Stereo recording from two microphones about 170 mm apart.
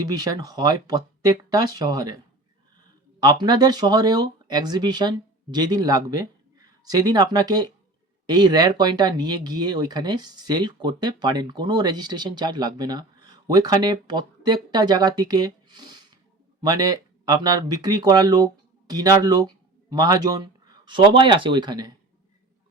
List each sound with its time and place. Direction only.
0.0 s speech: 20° right (ahead or behind)